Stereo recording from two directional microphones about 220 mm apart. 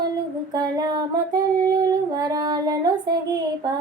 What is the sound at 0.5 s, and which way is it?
Child singing, 15° right (ahead or behind).